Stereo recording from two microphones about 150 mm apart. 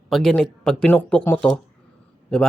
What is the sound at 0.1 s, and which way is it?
Speech, centre (ahead or behind).